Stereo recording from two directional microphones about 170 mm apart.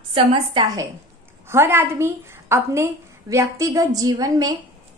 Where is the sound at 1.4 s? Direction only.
15° right (ahead or behind).